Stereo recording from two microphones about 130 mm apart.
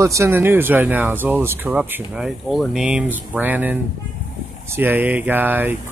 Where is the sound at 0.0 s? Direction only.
20° right (ahead or behind).